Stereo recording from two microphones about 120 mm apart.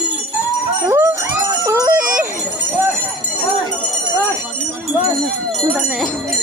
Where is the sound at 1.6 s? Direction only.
25° right (ahead or behind).